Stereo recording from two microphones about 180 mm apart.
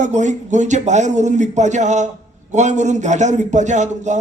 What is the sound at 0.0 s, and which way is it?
A man's voice, 40° right (ahead or behind).